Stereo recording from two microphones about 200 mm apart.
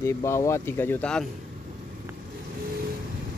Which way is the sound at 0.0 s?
15° left (ahead or behind).